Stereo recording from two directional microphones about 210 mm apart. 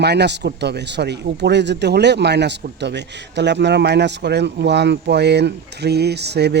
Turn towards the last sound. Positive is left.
turn(degrees=-50)  # may be behind; listen again after turning